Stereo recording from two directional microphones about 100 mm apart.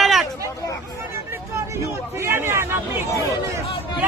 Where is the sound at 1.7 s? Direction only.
25° right (ahead or behind).